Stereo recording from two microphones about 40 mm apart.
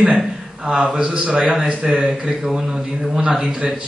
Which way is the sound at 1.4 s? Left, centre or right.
Centre.